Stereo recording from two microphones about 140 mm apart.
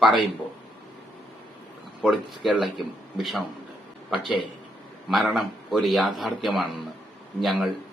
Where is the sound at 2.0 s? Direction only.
Centre (ahead or behind).